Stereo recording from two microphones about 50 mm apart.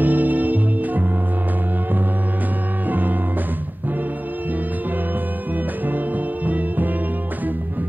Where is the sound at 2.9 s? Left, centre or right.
Right.